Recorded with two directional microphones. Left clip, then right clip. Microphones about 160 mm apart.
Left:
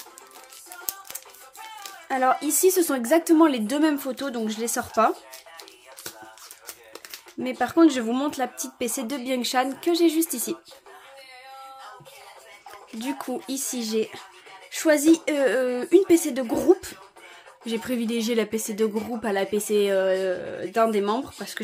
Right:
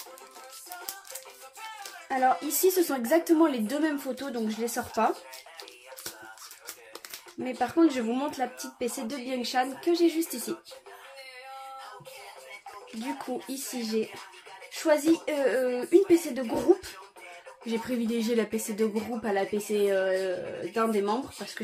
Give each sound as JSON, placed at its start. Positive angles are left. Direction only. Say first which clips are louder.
{"t": 1.8, "sound": "speech", "louder": "left 2 dB", "side_deg": 45}
{"t": 7.4, "sound": "speech", "louder": "left 5 dB", "side_deg": 45}
{"t": 13.0, "sound": "speech", "louder": "left 4 dB", "side_deg": 50}
{"t": 19.2, "sound": "speech", "louder": "left 4 dB", "side_deg": 50}